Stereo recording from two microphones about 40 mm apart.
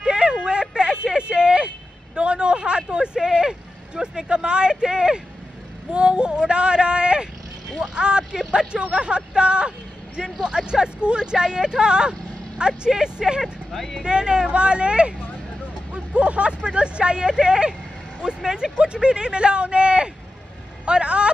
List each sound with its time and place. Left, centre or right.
0.0 s a sound: right
2.1 s vehicle: right
4.3 s a sound: right
7.8 s vehicle: right
10.4 s speech: right
14.0 s speech: right
20.8 s vehicle: right